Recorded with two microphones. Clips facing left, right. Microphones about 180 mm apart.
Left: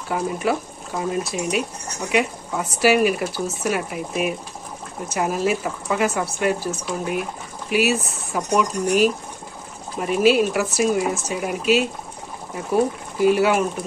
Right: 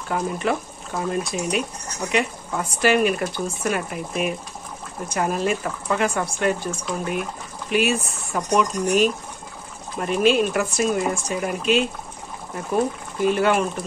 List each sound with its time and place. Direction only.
0.1 s speech: 5° left (ahead or behind)